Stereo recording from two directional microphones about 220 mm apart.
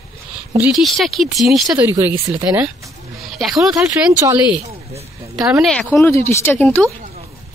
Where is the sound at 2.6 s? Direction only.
5° right (ahead or behind).